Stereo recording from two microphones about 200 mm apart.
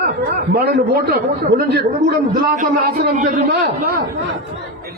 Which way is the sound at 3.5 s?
55° right (ahead or behind).